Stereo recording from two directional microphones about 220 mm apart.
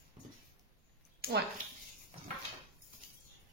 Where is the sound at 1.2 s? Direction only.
45° right (ahead or behind).